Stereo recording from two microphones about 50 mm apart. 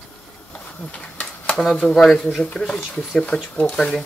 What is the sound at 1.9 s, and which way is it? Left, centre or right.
Speech, centre.